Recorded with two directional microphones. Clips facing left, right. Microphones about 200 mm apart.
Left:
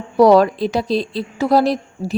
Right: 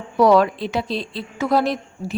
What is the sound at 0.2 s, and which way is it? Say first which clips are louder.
A woman's voice: left 4 dB; 35° left (ahead or behind).